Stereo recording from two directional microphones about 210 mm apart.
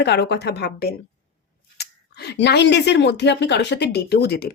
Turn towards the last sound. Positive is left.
turn(degrees=50)  # may be behind; listen again after turning